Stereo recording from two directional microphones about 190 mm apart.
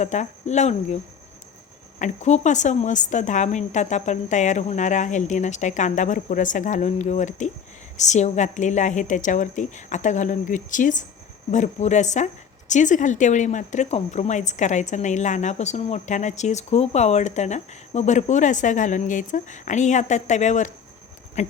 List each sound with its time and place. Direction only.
0.0 s speech: 40° left (ahead or behind)
2.0 s speech: 40° left (ahead or behind)